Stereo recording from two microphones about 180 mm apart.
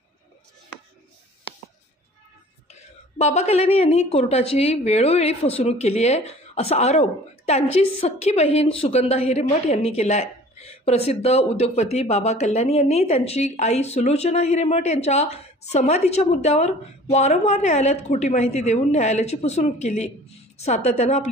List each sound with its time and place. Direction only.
2.7 s a woman's voice: 40° left (ahead or behind)